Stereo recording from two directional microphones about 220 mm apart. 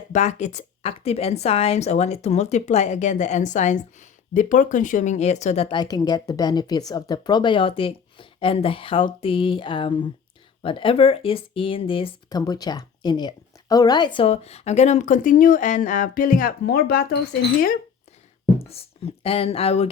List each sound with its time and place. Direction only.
0.1 s a woman's voice: 30° left (ahead or behind)
18.7 s speech: 25° left (ahead or behind)